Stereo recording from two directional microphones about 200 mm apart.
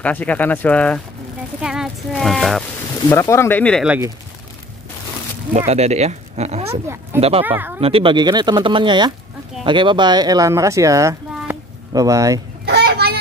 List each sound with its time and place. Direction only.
0.0 s speech: 5° left (ahead or behind)
3.1 s speech: 15° left (ahead or behind)
3.8 s speech: 5° right (ahead or behind)
5.7 s speech: 35° right (ahead or behind)
7.4 s speech: 10° right (ahead or behind)
7.8 s speech: 25° right (ahead or behind)
12.6 s a sound: 55° right (ahead or behind)